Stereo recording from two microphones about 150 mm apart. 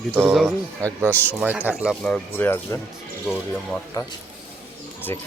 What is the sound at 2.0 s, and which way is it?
Speech, 10° left (ahead or behind).